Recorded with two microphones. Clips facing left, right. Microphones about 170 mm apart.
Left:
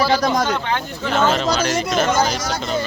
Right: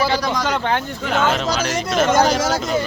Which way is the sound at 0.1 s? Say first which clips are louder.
Left 3 dB; 45° left (ahead or behind).